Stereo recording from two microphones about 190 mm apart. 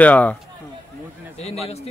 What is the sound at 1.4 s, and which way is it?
Speech, 35° left (ahead or behind).